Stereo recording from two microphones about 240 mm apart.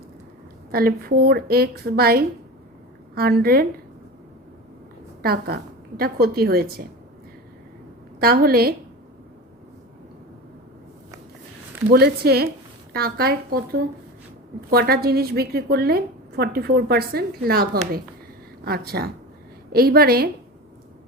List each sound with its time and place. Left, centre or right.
0.7 s a woman's voice: right
5.2 s a woman's voice: right
8.2 s a woman's voice: right
11.9 s a woman's voice: right